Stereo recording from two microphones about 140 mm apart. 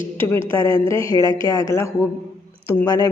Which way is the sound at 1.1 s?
25° left (ahead or behind).